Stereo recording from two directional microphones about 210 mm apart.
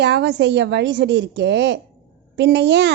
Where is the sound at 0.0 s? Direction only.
55° right (ahead or behind).